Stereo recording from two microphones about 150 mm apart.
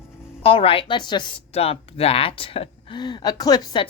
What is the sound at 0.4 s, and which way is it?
A woman's voice, 40° left (ahead or behind).